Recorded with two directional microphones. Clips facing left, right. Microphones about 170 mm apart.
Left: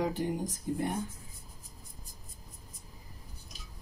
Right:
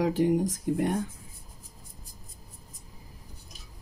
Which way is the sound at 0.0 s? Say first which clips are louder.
Right 8 dB; 85° right.